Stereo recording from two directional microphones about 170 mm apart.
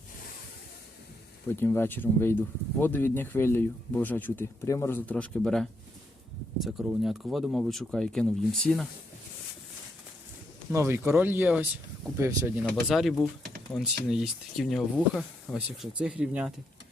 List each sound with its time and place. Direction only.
1.5 s speech: 15° left (ahead or behind)
10.7 s speech: 15° right (ahead or behind)
12.6 s speech: centre (ahead or behind)